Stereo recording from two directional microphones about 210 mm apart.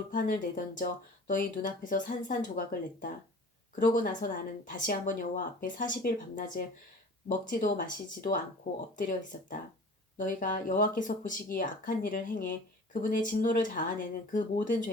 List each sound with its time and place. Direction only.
0.1 s speech: 40° left (ahead or behind)